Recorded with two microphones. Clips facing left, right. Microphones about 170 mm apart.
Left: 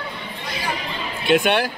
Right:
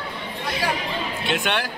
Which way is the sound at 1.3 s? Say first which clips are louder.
Left 8 dB; 15° left (ahead or behind).